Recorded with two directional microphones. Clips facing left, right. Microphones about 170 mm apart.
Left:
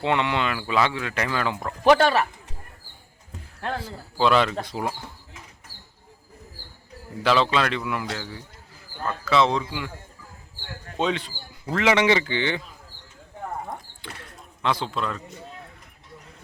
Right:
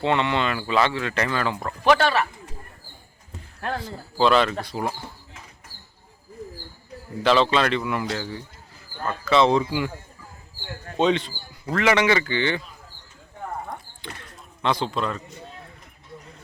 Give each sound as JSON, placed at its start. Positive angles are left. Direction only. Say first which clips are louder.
{"t": 0.0, "sound": "speech", "louder": "right 1 dB", "side_deg": 10}
{"t": 1.8, "sound": "speech", "louder": "left 2 dB", "side_deg": 40}
{"t": 3.6, "sound": "speech", "louder": "right 1 dB", "side_deg": 10}
{"t": 7.2, "sound": "speech", "louder": "right 2 dB", "side_deg": 5}
{"t": 11.0, "sound": "speech", "louder": "right 5 dB", "side_deg": 5}
{"t": 11.6, "sound": "speech", "louder": "even", "side_deg": 20}
{"t": 14.2, "sound": "a sound", "louder": "even", "side_deg": 5}